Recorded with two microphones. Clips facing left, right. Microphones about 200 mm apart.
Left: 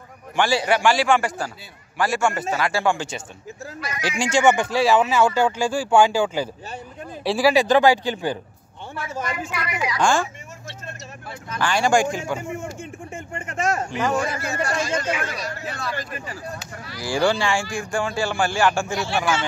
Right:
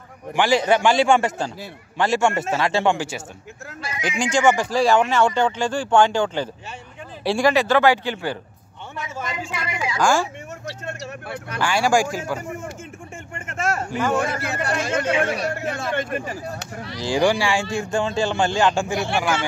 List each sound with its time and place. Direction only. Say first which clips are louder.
0.4 s speech: right 2 dB; 20° right (ahead or behind)
4.2 s speech: even; 5° left (ahead or behind)
7.5 s speech: left 1 dB; 15° left (ahead or behind)
9.3 s speech: left 1 dB; 25° right (ahead or behind)
10.9 s speech: right 6 dB; 65° right (ahead or behind)
11.6 s speech: even; 5° right (ahead or behind)
13.7 s speech: even; 20° left (ahead or behind)
14.7 s speech: right 4 dB; 60° right (ahead or behind)
17.0 s speech: right 2 dB; 15° right (ahead or behind)
18.9 s speech: right 1 dB; 55° right (ahead or behind)